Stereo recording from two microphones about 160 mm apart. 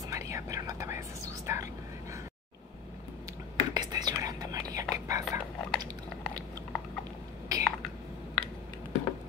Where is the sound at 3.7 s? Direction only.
25° right (ahead or behind).